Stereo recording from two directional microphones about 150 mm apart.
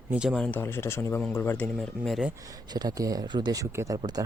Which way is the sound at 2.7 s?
25° right (ahead or behind).